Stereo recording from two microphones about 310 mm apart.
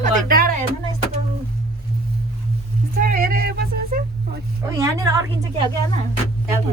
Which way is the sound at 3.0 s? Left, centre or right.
Right.